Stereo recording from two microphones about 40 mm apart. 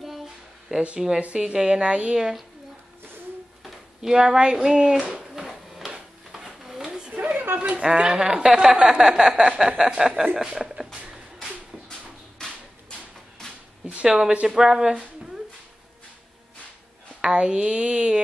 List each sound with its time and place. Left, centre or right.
0.7 s speech: right
1.4 s speech: centre
4.0 s speech: centre
5.3 s a sound: centre
7.1 s a sound: right
7.5 s a woman's voice: right
14.0 s speech: centre
17.2 s speech: right